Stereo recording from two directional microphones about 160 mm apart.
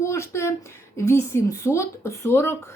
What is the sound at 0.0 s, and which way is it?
A woman's voice, 15° left (ahead or behind).